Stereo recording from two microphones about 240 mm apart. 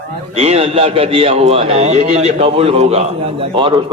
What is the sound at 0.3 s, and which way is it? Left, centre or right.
A man's voice, right.